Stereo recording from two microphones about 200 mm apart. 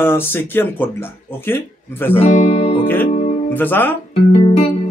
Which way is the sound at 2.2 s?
30° left (ahead or behind).